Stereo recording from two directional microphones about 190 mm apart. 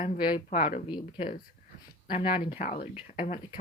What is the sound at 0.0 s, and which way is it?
Speech, 25° left (ahead or behind).